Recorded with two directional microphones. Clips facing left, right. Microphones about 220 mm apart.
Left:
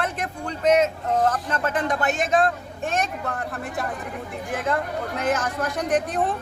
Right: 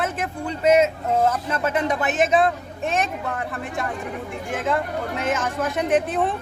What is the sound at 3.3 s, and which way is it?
Speech, centre (ahead or behind).